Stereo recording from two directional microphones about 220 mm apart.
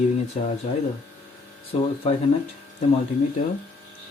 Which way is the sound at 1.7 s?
25° left (ahead or behind).